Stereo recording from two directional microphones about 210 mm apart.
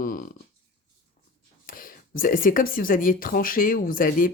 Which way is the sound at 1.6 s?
40° left (ahead or behind).